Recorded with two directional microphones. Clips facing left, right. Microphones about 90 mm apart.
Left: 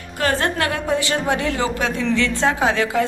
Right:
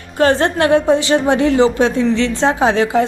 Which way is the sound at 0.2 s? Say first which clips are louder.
Right 7 dB; 30° right (ahead or behind).